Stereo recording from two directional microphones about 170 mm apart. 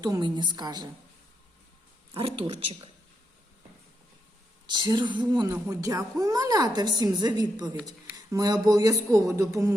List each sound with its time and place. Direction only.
0.0 s a woman's voice: 25° right (ahead or behind)
2.1 s speech: 35° right (ahead or behind)
4.6 s a woman's voice: 25° right (ahead or behind)